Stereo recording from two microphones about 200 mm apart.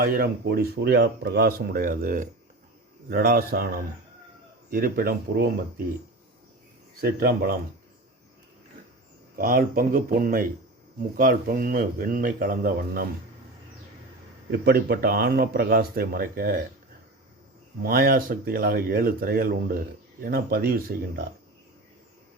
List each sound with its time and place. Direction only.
0.0 s speech: 50° right (ahead or behind)
7.0 s speech: 50° right (ahead or behind)
9.3 s speech: 45° right (ahead or behind)
14.5 s speech: 50° right (ahead or behind)
17.8 s speech: 50° right (ahead or behind)